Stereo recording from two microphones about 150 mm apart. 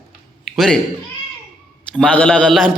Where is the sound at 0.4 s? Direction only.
Centre (ahead or behind).